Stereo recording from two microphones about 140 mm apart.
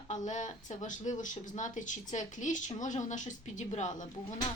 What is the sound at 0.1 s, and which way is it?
Speech, 60° left (ahead or behind).